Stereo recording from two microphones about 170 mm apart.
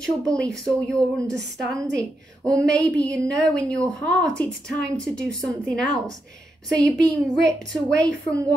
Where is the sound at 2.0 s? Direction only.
20° right (ahead or behind).